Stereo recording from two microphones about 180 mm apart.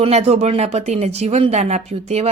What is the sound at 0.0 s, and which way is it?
A woman's voice, 35° right (ahead or behind).